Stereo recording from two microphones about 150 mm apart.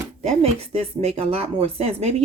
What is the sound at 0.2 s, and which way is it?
Speech, 40° right (ahead or behind).